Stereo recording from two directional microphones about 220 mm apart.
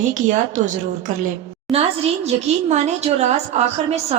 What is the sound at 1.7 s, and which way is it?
A woman's voice, 25° right (ahead or behind).